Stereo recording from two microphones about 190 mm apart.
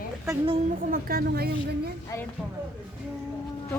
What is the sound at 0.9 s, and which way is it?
A woman's voice, 50° right (ahead or behind).